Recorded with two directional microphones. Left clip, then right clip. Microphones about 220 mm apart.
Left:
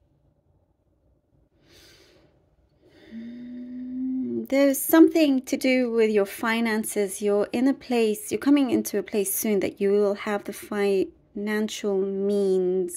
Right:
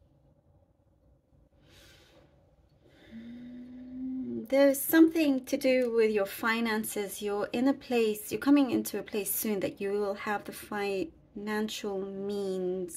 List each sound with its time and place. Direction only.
1.7 s snort: 30° left (ahead or behind)
2.9 s a sound: 30° left (ahead or behind)
4.2 s a woman's voice: 35° left (ahead or behind)